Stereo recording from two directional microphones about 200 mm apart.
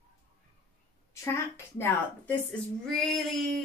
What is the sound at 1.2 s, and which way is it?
A woman's voice, 15° left (ahead or behind).